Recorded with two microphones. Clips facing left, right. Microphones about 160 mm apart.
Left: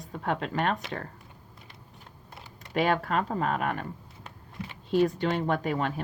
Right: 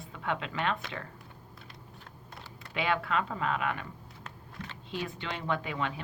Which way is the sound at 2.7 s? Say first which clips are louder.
Left 4 dB; 40° left (ahead or behind).